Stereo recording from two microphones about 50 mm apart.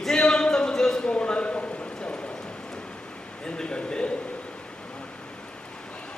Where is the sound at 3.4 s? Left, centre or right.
Centre.